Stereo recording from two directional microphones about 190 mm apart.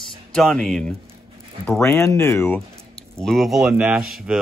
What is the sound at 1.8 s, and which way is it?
Speech, 15° left (ahead or behind).